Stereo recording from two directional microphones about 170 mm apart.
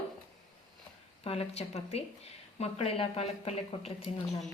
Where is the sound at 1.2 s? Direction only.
35° left (ahead or behind).